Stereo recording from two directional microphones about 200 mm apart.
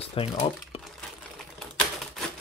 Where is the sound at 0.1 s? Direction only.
30° left (ahead or behind).